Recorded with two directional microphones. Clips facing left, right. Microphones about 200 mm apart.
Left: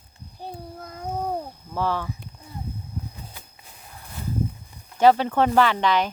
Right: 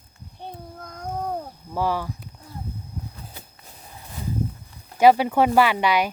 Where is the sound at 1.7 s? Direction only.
10° right (ahead or behind).